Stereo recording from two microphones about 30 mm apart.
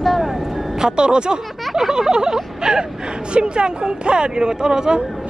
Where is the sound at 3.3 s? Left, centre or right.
Right.